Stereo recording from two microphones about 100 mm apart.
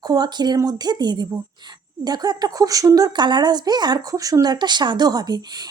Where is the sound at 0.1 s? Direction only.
45° right (ahead or behind).